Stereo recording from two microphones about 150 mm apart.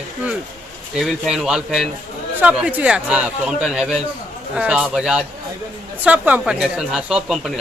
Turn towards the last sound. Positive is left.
turn(degrees=-5)  # may be behind; listen again after turning